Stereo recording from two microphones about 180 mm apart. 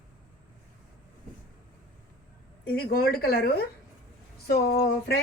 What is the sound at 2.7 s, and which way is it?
A woman's voice, 55° left (ahead or behind).